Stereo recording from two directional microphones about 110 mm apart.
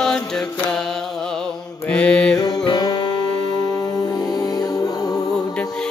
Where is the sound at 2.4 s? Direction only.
40° left (ahead or behind).